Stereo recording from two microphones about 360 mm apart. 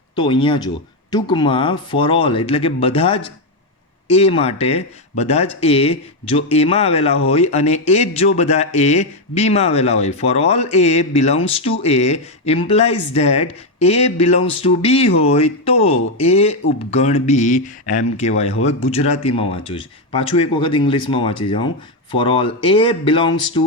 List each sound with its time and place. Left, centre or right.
0.2 s speech: centre